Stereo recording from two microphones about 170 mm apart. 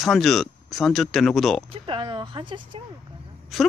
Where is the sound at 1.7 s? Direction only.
30° right (ahead or behind).